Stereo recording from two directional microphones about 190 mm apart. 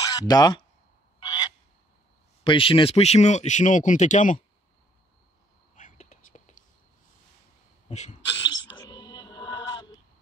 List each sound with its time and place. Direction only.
0.0 s speech: 20° left (ahead or behind)
1.2 s frog: 20° left (ahead or behind)
2.4 s speech: 25° left (ahead or behind)
5.8 s whispering: 40° left (ahead or behind)
7.9 s speech: 35° left (ahead or behind)
8.5 s music: 20° left (ahead or behind)